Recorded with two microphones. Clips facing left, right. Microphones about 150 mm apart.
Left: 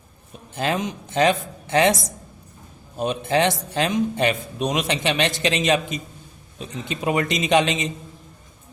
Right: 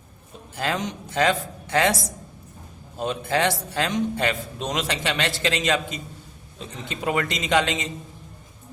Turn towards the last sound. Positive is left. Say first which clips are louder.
# left 3 dB
turn(degrees=20)  # may be behind; listen again after turning